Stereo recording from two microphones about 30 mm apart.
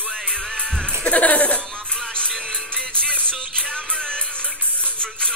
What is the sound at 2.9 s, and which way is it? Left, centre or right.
Carnatic music, left.